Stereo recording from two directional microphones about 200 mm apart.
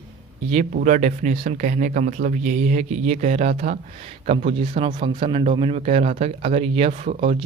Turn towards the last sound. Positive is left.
turn(degrees=-30)  # may be behind; listen again after turning